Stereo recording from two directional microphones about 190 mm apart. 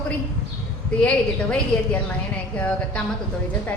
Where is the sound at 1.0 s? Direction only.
5° left (ahead or behind).